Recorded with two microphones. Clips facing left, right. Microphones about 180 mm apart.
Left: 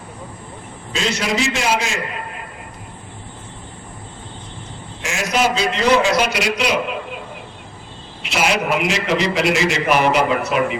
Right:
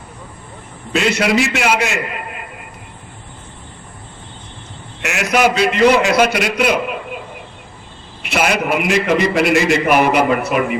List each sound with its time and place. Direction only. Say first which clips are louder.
0.9 s a man's voice: right 5 dB; 65° right (ahead or behind)
5.0 s a man's voice: right 4 dB; 65° right (ahead or behind)
8.2 s a man's voice: right 2 dB; 55° right (ahead or behind)